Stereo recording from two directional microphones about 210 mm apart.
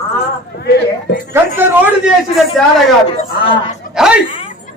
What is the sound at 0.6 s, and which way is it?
Speech, 50° left (ahead or behind).